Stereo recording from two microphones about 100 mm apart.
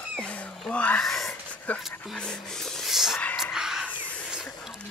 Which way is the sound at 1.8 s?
5° left (ahead or behind).